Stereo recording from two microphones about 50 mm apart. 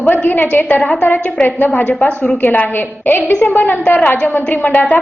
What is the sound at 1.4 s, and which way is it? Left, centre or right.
Speech, left.